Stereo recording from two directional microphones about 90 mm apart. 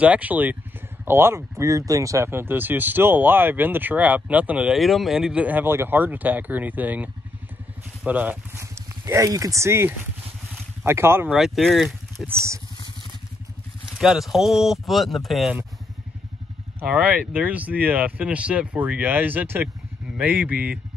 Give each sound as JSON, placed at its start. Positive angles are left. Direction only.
{"t": 0.0, "sound": "speech", "side_deg": -15}
{"t": 4.7, "sound": "speech", "side_deg": 0}
{"t": 8.7, "sound": "speech", "side_deg": -35}
{"t": 11.3, "sound": "speech", "side_deg": 0}
{"t": 12.3, "sound": "speech", "side_deg": -30}
{"t": 13.9, "sound": "speech", "side_deg": -5}
{"t": 16.8, "sound": "speech", "side_deg": -15}